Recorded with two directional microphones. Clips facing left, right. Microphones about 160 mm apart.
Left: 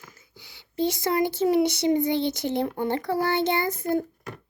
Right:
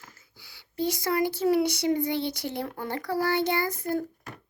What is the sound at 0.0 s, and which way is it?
A child's voice, 20° left (ahead or behind).